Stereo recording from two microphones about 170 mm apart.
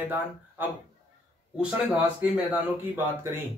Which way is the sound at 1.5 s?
5° right (ahead or behind).